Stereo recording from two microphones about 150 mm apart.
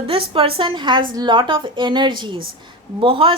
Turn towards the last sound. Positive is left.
turn(degrees=-35)  # may be behind; listen again after turning